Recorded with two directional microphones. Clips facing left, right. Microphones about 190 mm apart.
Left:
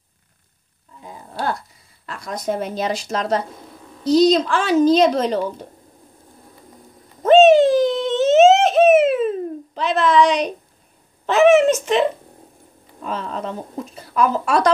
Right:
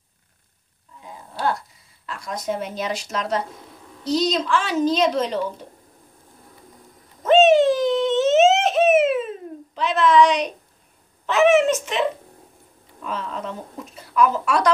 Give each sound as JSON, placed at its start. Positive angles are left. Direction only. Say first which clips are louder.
{"t": 2.0, "sound": "speech", "louder": "left 3 dB", "side_deg": 45}
{"t": 7.2, "sound": "a sound", "louder": "left 4 dB", "side_deg": 35}
{"t": 9.8, "sound": "speech", "louder": "even", "side_deg": 35}
{"t": 13.0, "sound": "speech", "louder": "left 3 dB", "side_deg": 35}